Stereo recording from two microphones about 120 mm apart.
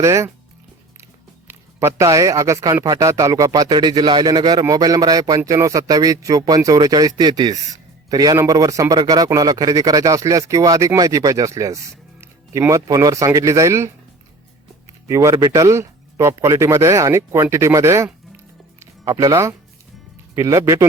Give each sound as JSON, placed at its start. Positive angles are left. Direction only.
{"t": 0.0, "sound": "a man's voice", "side_deg": -25}
{"t": 1.5, "sound": "a man's voice", "side_deg": -20}
{"t": 15.0, "sound": "a man's voice", "side_deg": -25}